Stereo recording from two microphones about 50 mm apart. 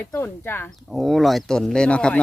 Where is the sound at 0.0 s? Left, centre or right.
Left.